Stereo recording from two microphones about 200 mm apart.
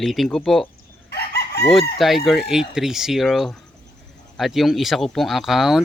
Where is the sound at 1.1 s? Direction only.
55° left (ahead or behind).